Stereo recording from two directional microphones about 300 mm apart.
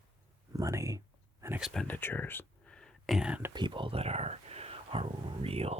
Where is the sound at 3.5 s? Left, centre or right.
Centre.